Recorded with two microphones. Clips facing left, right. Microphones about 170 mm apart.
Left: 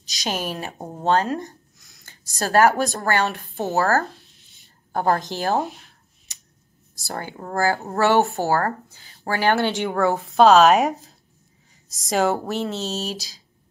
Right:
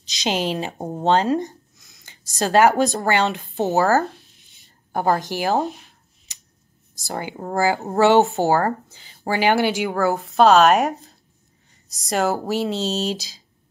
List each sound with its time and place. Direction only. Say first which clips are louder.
0.1 s a woman's voice: right 4 dB; 20° right (ahead or behind)
7.1 s speech: right 3 dB; 15° right (ahead or behind)
9.8 s a woman's voice: even; centre (ahead or behind)
12.4 s speech: right 3 dB; 15° right (ahead or behind)